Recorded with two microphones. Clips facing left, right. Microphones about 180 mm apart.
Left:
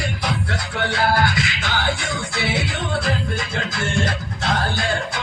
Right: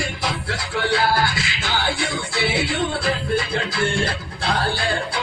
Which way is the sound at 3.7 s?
30° right (ahead or behind).